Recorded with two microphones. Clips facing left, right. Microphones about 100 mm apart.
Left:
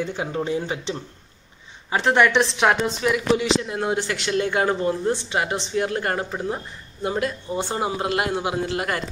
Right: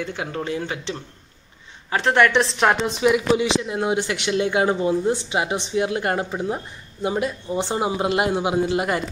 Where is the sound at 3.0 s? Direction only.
20° right (ahead or behind).